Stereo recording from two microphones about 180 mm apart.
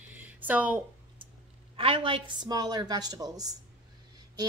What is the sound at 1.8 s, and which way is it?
Speech, 30° right (ahead or behind).